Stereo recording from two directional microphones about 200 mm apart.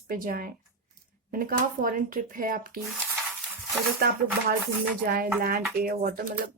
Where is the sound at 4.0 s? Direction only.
45° right (ahead or behind).